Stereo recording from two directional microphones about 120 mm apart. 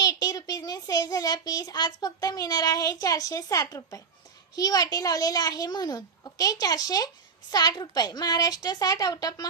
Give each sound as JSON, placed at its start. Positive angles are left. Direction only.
{"t": 0.0, "sound": "a child's voice", "side_deg": 35}